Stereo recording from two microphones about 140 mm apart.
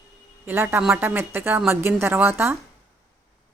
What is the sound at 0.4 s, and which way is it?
A woman's voice, 15° right (ahead or behind).